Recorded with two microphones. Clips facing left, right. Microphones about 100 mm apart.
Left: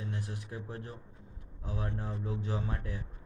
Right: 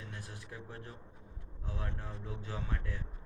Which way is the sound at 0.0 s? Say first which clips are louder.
Left 7 dB; 25° left (ahead or behind).